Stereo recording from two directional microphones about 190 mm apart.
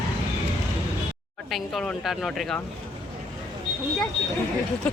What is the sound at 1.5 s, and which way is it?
Speech, centre (ahead or behind).